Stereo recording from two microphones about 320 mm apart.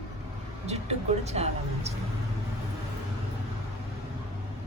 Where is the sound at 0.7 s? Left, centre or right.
Centre.